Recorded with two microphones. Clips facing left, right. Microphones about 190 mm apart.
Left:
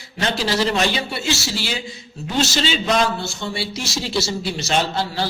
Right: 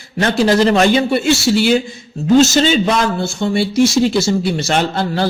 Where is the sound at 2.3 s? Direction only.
45° right (ahead or behind).